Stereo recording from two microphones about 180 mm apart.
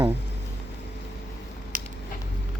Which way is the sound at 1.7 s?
50° right (ahead or behind).